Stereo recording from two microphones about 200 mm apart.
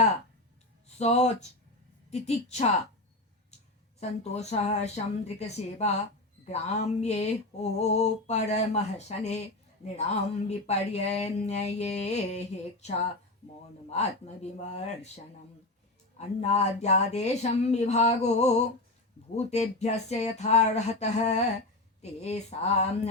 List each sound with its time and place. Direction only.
0.9 s speech: 35° left (ahead or behind)
4.2 s speech: 35° left (ahead or behind)